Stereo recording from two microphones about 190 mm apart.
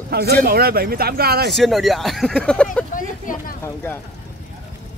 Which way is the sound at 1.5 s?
Centre (ahead or behind).